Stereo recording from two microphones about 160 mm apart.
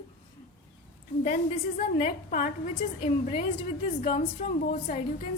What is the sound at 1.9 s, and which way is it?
Speech, 55° left (ahead or behind).